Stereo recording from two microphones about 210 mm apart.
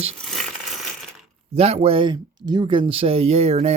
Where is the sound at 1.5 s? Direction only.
30° right (ahead or behind).